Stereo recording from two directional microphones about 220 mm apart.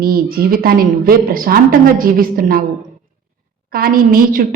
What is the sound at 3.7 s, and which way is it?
Speech, 40° right (ahead or behind).